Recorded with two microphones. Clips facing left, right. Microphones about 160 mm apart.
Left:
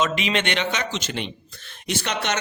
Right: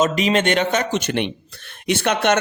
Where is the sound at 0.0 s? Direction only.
40° right (ahead or behind).